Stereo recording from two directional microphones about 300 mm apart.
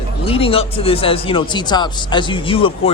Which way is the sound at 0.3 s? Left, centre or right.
Centre.